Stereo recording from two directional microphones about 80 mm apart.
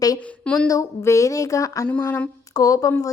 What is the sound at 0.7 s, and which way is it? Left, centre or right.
A woman's voice, left.